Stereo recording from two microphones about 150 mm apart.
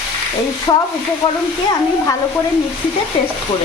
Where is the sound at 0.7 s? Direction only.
25° left (ahead or behind).